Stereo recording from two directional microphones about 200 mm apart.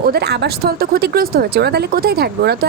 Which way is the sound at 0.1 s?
55° right (ahead or behind).